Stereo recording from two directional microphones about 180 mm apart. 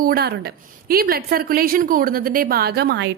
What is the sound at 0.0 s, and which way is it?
A woman's voice, 60° right (ahead or behind).